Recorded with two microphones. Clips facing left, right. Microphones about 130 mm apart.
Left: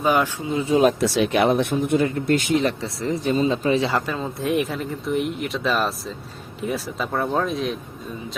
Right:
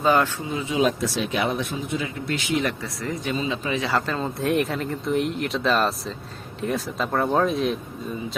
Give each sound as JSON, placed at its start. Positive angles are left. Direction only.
{"t": 0.0, "sound": "speech", "side_deg": 15}
{"t": 0.7, "sound": "speech", "side_deg": 45}
{"t": 0.9, "sound": "speech", "side_deg": 70}
{"t": 2.6, "sound": "speech", "side_deg": 25}
{"t": 3.3, "sound": "speech", "side_deg": 40}
{"t": 3.9, "sound": "speech", "side_deg": 10}